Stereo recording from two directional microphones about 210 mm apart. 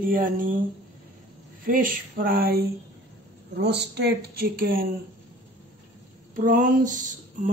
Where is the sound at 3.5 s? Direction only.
55° right (ahead or behind).